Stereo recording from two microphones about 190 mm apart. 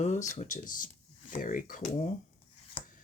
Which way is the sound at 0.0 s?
40° left (ahead or behind).